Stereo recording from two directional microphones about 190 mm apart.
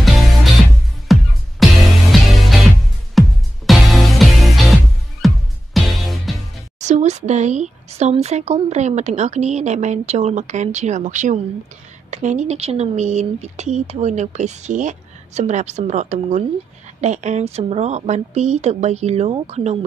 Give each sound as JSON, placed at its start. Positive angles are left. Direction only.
{"t": 0.0, "sound": "music", "side_deg": 0}
{"t": 6.8, "sound": "speech", "side_deg": -40}